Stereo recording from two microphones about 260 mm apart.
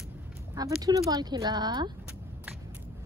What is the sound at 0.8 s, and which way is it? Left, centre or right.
Speech, centre.